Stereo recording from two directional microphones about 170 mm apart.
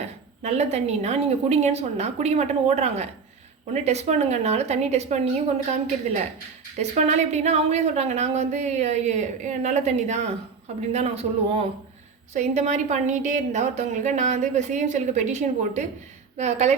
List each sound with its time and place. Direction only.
0.4 s speech: 40° right (ahead or behind)
6.7 s a woman's voice: 40° right (ahead or behind)